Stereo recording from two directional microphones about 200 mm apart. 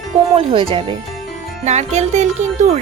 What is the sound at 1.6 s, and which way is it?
Music, 35° right (ahead or behind).